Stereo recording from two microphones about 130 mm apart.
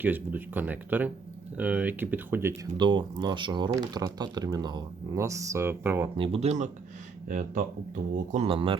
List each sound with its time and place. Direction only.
0.0 s speech: 15° right (ahead or behind)
2.7 s speech: 35° right (ahead or behind); by 6.1 s 15° right (ahead or behind)
6.1 s speech: 45° right (ahead or behind)
7.3 s speech: 90° right
8.4 s speech: 40° right (ahead or behind)